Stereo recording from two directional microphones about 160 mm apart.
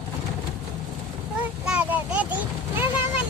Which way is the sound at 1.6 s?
5° right (ahead or behind).